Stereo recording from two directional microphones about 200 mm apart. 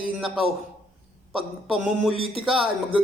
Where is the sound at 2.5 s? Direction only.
25° right (ahead or behind).